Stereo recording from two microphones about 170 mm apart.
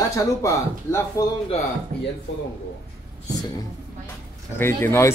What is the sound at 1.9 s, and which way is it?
Speech, 5° left (ahead or behind).